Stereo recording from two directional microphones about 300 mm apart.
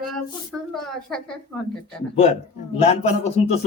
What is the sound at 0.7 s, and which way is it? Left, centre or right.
Speech, centre.